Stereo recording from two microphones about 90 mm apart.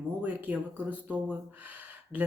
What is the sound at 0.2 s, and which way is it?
A woman's voice, 15° right (ahead or behind).